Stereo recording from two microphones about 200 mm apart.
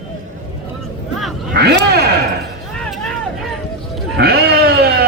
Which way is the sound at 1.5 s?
55° right (ahead or behind).